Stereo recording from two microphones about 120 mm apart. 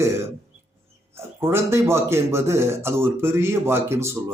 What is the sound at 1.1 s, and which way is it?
A man's voice, 20° right (ahead or behind).